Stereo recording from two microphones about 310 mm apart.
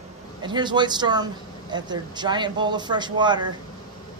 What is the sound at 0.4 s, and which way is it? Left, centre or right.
Speech, centre.